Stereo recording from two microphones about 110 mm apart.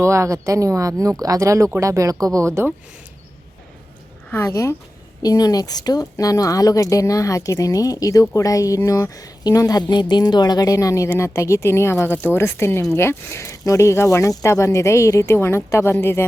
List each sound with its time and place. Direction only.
0.0 s speech: 25° right (ahead or behind)
4.3 s a woman's voice: 25° left (ahead or behind)